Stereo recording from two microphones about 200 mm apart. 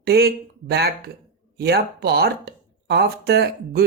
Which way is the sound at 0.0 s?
50° right (ahead or behind).